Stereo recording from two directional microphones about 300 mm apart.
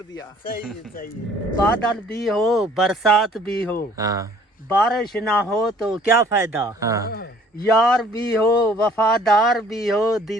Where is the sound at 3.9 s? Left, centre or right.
Centre.